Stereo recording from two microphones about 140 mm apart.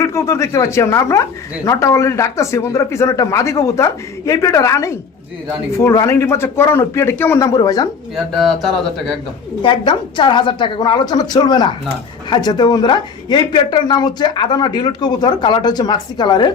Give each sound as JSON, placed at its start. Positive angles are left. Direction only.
{"t": 0.0, "sound": "speech", "side_deg": 20}
{"t": 8.1, "sound": "speech", "side_deg": 0}
{"t": 9.6, "sound": "a woman's voice", "side_deg": 35}